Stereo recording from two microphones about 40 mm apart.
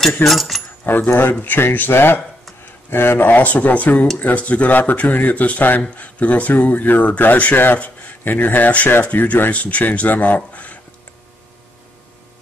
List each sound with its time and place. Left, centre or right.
0.2 s speech: centre
0.8 s speech: left
5.8 s speech: left
7.5 s speech: left